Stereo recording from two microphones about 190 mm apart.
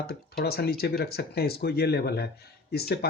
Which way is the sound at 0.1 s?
55° left (ahead or behind).